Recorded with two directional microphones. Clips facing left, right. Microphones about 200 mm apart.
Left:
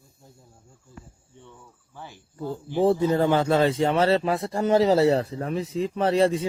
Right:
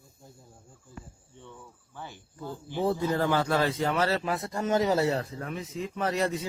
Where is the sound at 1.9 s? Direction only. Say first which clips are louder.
Left 4 dB; 5° left (ahead or behind).